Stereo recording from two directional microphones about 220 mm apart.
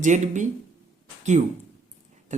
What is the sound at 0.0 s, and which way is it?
Speech, 35° right (ahead or behind).